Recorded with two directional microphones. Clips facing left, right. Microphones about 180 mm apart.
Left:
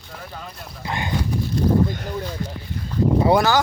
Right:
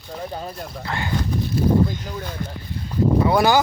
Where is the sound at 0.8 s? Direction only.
20° left (ahead or behind).